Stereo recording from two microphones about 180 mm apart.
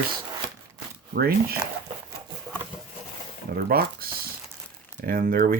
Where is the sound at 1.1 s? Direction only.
60° right (ahead or behind).